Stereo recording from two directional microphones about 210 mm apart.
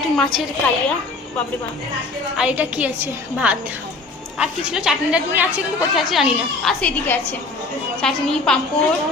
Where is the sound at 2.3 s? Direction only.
5° right (ahead or behind).